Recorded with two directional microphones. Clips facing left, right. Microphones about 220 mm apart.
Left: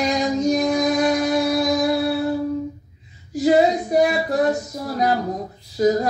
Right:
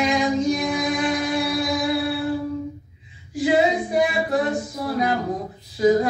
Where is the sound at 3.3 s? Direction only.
40° left (ahead or behind).